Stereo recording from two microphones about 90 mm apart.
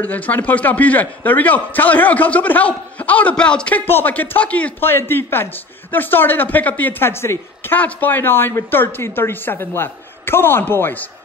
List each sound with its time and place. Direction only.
0.0 s a man's voice: 15° left (ahead or behind)